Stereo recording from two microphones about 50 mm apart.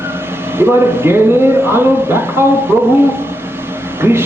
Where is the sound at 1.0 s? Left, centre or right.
Right.